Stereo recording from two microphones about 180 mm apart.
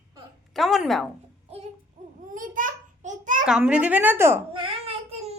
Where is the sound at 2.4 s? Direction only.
50° right (ahead or behind).